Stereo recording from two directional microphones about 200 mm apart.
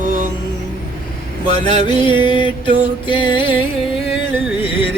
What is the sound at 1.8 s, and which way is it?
Music, 25° left (ahead or behind).